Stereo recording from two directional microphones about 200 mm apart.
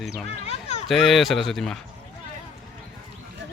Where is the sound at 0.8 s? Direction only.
Centre (ahead or behind).